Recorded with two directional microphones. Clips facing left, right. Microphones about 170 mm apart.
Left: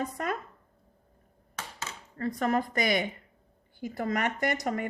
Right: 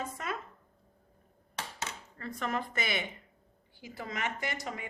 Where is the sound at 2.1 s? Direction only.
40° left (ahead or behind).